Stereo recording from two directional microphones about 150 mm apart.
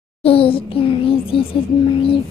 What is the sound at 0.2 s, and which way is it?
A child's voice, 40° left (ahead or behind).